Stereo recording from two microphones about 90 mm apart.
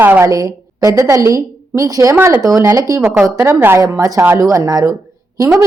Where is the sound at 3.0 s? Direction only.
15° right (ahead or behind).